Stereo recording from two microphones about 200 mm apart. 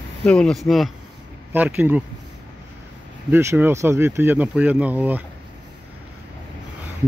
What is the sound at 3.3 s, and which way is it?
Speech, 10° right (ahead or behind).